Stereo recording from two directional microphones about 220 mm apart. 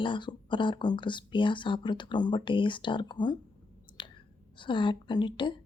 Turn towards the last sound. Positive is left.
turn(degrees=20)  # may be behind; listen again after turning